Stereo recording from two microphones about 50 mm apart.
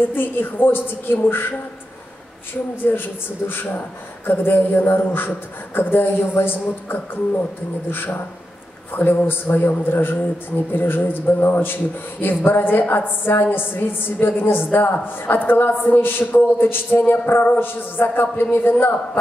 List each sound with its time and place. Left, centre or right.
0.1 s a woman's voice: left
2.9 s a woman's voice: left